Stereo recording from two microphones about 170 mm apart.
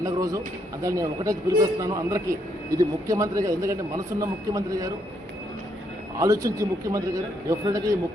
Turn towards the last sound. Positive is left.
turn(degrees=-20)  # may be behind; listen again after turning